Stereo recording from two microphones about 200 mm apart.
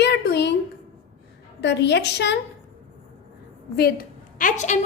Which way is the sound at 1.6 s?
60° left (ahead or behind).